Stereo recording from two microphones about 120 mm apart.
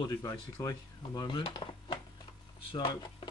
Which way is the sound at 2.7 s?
35° left (ahead or behind).